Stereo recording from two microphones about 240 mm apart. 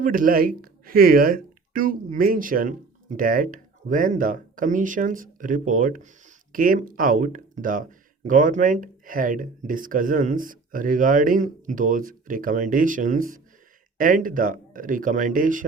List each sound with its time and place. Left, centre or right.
0.0 s speech: right